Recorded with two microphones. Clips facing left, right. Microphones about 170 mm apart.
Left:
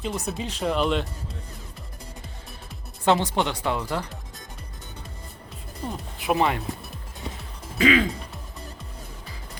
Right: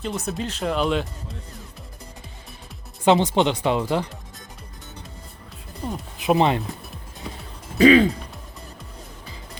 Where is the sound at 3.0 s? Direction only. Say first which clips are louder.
Right 4 dB; 20° right (ahead or behind).